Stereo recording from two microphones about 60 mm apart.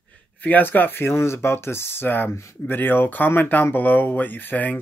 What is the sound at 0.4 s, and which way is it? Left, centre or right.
Speech, left.